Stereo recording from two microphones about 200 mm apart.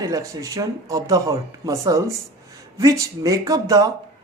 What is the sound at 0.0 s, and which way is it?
Speech, 15° right (ahead or behind).